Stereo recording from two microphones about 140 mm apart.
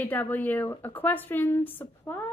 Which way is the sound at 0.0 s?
15° left (ahead or behind).